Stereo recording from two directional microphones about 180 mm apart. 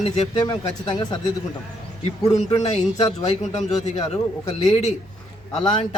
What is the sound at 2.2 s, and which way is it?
Speech, 20° left (ahead or behind).